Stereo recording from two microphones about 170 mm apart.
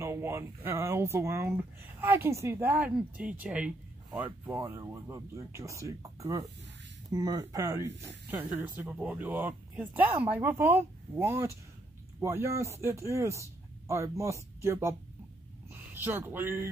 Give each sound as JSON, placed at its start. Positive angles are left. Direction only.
{"t": 0.0, "sound": "speech", "side_deg": -15}